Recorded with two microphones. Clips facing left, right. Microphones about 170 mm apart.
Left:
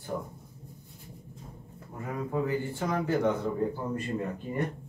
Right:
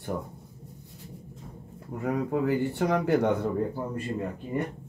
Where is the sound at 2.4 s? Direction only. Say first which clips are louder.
Right 5 dB; 70° right (ahead or behind).